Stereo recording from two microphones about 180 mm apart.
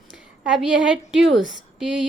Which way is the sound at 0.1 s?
5° right (ahead or behind).